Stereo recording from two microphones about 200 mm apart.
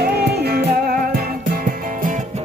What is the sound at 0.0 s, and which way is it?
Music, 50° right (ahead or behind).